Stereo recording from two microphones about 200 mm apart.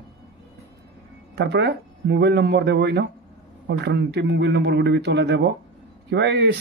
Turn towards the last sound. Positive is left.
turn(degrees=-60)  # may be behind; listen again after turning